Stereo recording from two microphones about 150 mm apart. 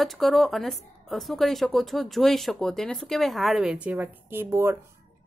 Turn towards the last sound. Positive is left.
turn(degrees=-15)  # may be behind; listen again after turning